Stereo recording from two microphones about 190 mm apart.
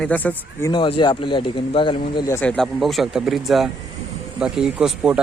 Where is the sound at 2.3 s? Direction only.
5° left (ahead or behind).